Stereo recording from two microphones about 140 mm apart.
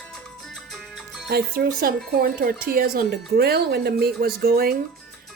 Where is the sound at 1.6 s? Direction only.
90° right.